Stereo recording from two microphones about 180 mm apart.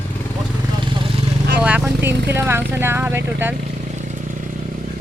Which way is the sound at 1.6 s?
10° right (ahead or behind).